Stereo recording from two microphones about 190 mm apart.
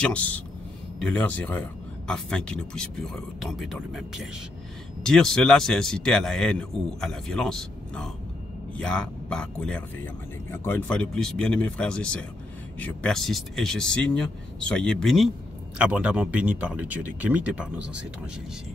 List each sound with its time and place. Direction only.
0.0 s a man's voice: 5° left (ahead or behind)